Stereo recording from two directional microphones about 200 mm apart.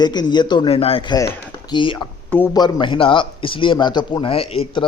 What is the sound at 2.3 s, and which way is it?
Speech, 10° left (ahead or behind).